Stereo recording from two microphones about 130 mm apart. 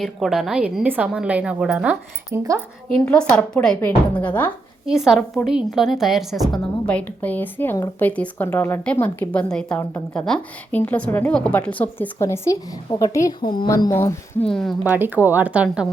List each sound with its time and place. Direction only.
0.0 s a woman's voice: centre (ahead or behind)
2.3 s speech: 20° right (ahead or behind)
2.9 s a woman's voice: 5° left (ahead or behind)
4.9 s a woman's voice: 5° right (ahead or behind); by 14.4 s 20° left (ahead or behind)
14.4 s a woman's voice: 5° left (ahead or behind)
14.8 s a woman's voice: 15° right (ahead or behind)